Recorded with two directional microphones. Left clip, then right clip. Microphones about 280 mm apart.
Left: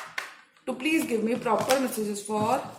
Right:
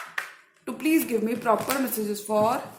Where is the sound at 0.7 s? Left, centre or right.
Right.